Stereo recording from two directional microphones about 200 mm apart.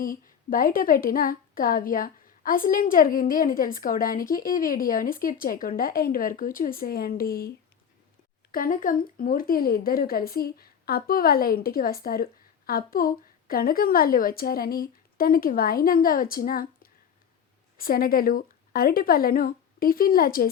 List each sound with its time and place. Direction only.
0.5 s a woman's voice: 45° left (ahead or behind)
8.5 s a woman's voice: 45° left (ahead or behind)